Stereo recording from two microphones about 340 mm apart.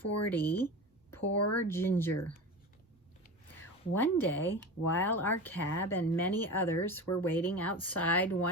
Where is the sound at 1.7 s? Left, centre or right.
Centre.